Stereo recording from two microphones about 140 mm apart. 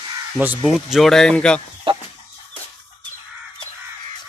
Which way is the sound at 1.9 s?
40° right (ahead or behind).